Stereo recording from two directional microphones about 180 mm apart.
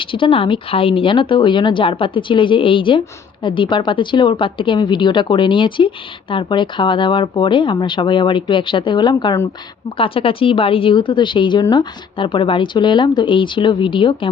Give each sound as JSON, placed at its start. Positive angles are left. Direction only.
{"t": 0.0, "sound": "a woman's voice", "side_deg": 30}